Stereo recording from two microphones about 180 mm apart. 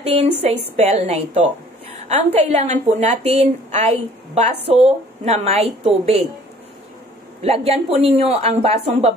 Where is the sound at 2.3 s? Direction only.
35° right (ahead or behind).